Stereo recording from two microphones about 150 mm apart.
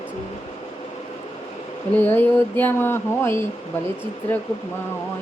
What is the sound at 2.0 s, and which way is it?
Speech, 10° left (ahead or behind).